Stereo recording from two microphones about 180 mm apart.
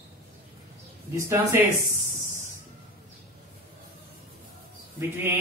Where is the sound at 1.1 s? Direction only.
15° right (ahead or behind).